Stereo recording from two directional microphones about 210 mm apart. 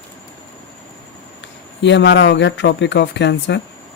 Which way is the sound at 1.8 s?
55° left (ahead or behind).